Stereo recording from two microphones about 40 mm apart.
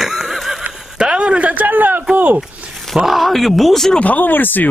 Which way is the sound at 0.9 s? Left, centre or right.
Right.